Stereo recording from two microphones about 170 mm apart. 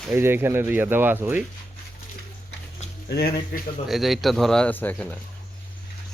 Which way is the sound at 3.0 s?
65° left (ahead or behind).